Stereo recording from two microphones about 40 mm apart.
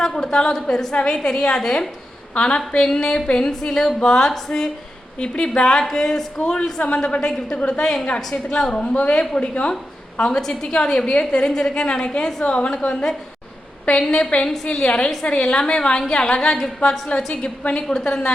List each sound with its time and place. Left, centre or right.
0.0 s a woman's voice: centre
5.2 s a woman's voice: left
6.4 s a woman's voice: left
10.3 s a woman's voice: centre
14.1 s a woman's voice: left
17.7 s a woman's voice: centre